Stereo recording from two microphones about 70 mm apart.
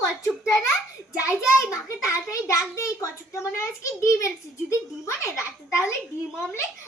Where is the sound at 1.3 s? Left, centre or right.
Left.